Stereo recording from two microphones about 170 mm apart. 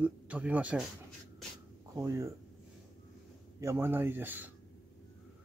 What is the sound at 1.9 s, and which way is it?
Speech, 20° right (ahead or behind).